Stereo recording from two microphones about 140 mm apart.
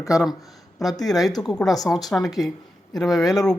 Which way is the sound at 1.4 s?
5° left (ahead or behind).